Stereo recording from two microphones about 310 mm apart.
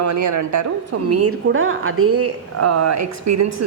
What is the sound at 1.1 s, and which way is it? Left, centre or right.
Speech, right.